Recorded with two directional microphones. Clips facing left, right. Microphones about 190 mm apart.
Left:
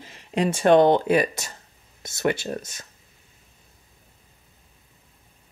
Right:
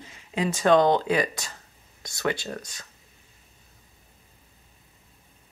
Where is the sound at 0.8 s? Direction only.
20° left (ahead or behind).